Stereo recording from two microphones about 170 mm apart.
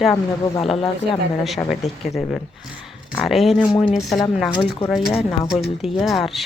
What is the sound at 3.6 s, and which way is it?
Speech, 30° left (ahead or behind).